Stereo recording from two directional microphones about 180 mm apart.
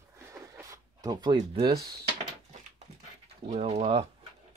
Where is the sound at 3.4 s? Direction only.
35° right (ahead or behind).